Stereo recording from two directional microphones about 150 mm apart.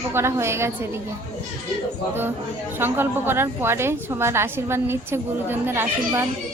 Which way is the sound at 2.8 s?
15° right (ahead or behind).